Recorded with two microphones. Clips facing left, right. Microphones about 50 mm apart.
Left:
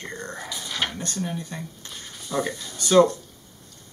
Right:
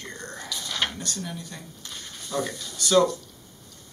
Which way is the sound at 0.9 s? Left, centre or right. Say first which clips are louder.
Left 4 dB; left.